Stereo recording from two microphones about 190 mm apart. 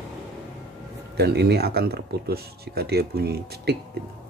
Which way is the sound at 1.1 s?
60° right (ahead or behind).